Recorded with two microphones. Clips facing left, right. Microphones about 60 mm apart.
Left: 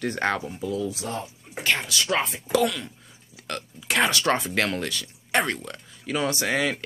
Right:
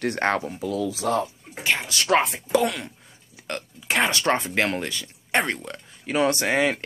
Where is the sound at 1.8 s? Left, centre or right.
Right.